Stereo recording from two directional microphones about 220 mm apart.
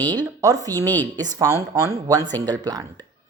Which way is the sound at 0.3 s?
15° right (ahead or behind).